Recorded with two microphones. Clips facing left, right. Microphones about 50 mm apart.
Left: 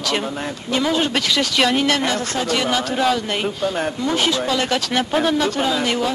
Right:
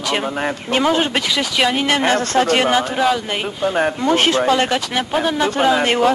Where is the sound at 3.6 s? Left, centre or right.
Right.